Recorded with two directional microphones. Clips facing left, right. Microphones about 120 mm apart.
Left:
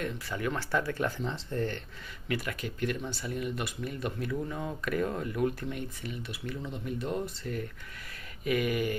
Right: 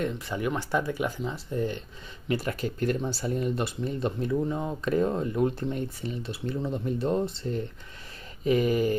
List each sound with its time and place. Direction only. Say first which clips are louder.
0.0 s speech: right 4 dB; 20° right (ahead or behind)
2.2 s speech: right 5 dB; 30° right (ahead or behind)
8.5 s a sound: right 5 dB; 30° right (ahead or behind)